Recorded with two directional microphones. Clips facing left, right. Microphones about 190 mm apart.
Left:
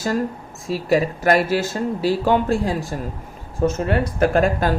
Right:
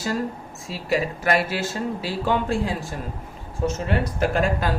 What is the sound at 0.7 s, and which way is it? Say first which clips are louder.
Speech: left 6 dB; 45° left (ahead or behind).